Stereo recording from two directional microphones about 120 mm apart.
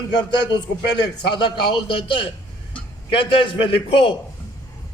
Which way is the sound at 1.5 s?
40° left (ahead or behind).